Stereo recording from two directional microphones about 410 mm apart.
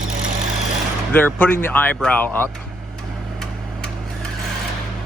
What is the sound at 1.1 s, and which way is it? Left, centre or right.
Speech, centre.